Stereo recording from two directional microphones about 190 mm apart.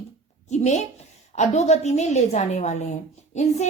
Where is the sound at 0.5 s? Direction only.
35° left (ahead or behind).